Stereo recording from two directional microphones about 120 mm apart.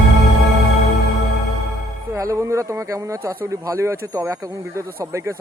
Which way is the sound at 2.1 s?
25° right (ahead or behind).